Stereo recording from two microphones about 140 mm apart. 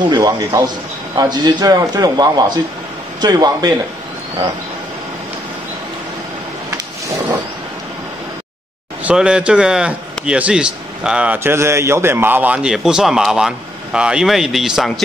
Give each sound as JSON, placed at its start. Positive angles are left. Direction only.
{"t": 0.1, "sound": "a man's voice", "side_deg": -25}
{"t": 9.0, "sound": "a man's voice", "side_deg": -5}